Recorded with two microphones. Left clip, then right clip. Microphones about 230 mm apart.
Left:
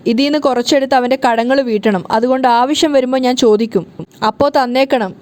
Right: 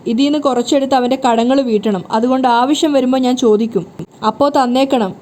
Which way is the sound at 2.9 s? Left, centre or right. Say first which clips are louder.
Left 2 dB; left.